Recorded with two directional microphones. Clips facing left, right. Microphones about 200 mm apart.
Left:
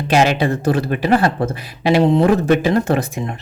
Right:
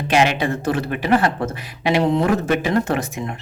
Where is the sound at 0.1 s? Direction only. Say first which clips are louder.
Left 3 dB; 35° left (ahead or behind).